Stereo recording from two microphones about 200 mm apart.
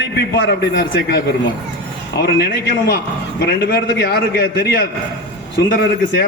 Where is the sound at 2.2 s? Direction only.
55° left (ahead or behind).